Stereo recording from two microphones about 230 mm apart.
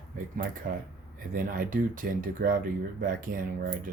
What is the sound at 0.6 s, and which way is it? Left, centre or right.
Speech, right.